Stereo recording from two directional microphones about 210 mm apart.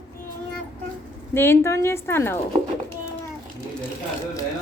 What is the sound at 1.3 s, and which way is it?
Speech, 10° left (ahead or behind).